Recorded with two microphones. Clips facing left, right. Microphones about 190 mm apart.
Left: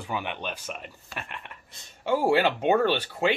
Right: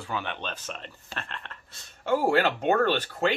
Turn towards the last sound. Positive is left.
turn(degrees=10)  # may be behind; listen again after turning